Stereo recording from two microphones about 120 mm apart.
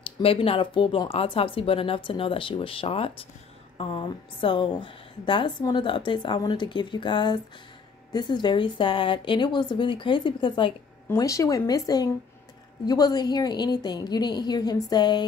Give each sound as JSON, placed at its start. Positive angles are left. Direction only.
{"t": 0.0, "sound": "a woman's voice", "side_deg": 50}
{"t": 11.1, "sound": "a woman's voice", "side_deg": 30}